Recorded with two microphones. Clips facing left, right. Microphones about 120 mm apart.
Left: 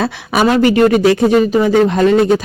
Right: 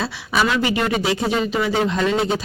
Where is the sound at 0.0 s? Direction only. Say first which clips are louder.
Left 7 dB; 55° left (ahead or behind).